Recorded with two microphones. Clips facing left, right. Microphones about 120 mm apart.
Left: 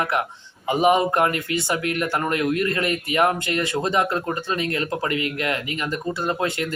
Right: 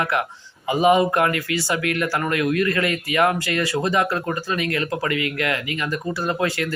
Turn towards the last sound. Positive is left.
turn(degrees=25)  # may be behind; listen again after turning